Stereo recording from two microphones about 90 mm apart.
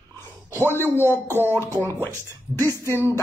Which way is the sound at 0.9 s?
25° left (ahead or behind).